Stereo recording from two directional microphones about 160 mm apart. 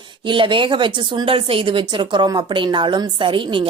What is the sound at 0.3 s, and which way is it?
Speech, 30° right (ahead or behind).